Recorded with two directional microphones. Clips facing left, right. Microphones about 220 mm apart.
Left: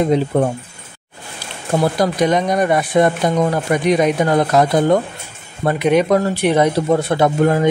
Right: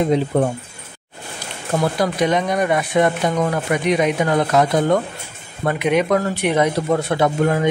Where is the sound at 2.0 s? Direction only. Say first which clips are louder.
Left 3 dB; 40° left (ahead or behind).